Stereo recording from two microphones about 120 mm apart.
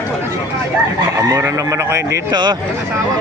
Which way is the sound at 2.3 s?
40° right (ahead or behind).